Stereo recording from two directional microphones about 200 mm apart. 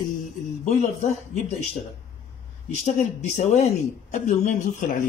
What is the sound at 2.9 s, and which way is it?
Speech, 35° left (ahead or behind).